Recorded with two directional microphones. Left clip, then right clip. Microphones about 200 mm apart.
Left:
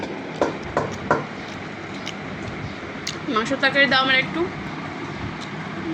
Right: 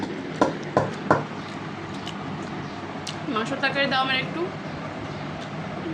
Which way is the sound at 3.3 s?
15° left (ahead or behind).